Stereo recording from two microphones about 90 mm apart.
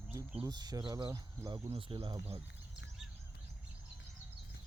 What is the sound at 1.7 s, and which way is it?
Speech, 80° right.